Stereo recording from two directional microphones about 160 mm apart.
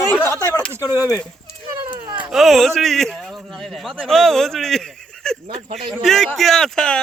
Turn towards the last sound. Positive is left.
turn(degrees=5)  # may be behind; listen again after turning